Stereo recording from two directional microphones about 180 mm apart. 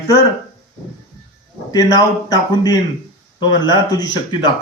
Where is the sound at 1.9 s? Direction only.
20° left (ahead or behind).